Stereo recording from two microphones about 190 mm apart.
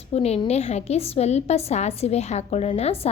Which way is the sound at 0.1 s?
35° left (ahead or behind).